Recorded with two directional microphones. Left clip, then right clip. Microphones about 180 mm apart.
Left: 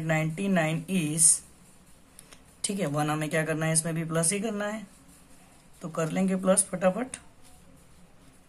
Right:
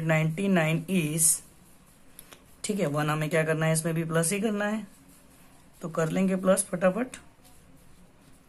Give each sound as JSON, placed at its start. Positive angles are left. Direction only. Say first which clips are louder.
{"t": 0.0, "sound": "a man's voice", "louder": "right 2 dB", "side_deg": -20}
{"t": 2.3, "sound": "a man's voice", "louder": "right 2 dB", "side_deg": -20}